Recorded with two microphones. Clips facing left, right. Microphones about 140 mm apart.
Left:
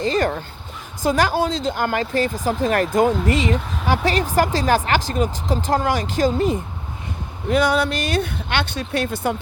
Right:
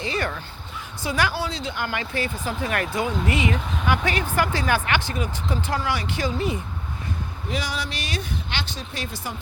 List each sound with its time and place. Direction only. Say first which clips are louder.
0.0 s speech: left 7 dB; 40° left (ahead or behind); by 9.3 s 60° left (ahead or behind)